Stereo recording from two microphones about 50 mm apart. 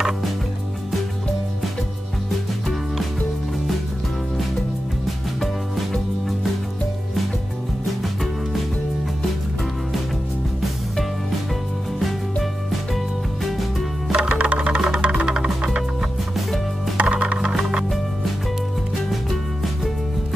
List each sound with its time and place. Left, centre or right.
12.9 s music: centre
14.1 s music: right